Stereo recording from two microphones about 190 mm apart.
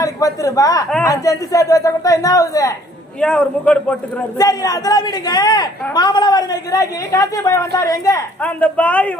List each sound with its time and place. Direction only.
0.0 s speech: 15° left (ahead or behind)
3.2 s a man's voice: 5° left (ahead or behind)
4.4 s a man's voice: 20° left (ahead or behind)